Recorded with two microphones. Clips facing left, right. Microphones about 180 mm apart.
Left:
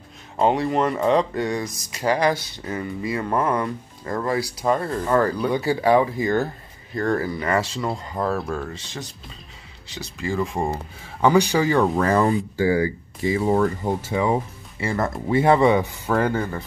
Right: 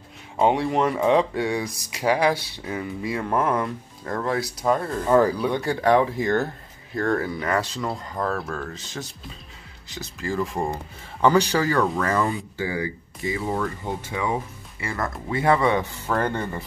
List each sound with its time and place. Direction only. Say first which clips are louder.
0.4 s speech: left 1 dB; 5° right (ahead or behind)
5.0 s speech: right 3 dB; 10° right (ahead or behind)
5.4 s speech: left 2 dB; 5° left (ahead or behind)